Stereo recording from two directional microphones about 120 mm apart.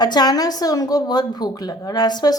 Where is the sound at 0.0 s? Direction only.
35° left (ahead or behind).